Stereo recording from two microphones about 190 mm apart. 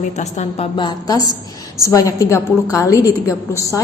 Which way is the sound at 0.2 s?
35° left (ahead or behind).